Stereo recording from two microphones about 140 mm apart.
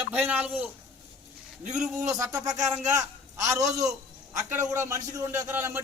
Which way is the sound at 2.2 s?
25° right (ahead or behind).